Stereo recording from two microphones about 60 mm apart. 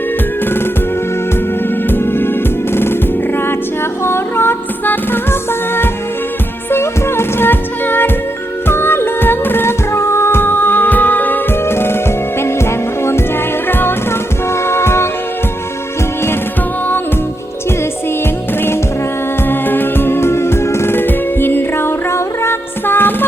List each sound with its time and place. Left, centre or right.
1.9 s music: left
11.6 s music: left
19.5 s music: left